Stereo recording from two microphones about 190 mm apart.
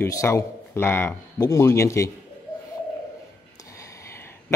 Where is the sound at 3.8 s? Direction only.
15° left (ahead or behind).